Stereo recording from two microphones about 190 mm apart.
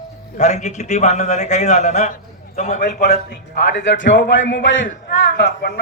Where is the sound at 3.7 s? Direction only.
70° left (ahead or behind).